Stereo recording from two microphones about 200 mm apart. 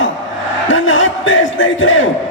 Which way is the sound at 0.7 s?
70° left (ahead or behind).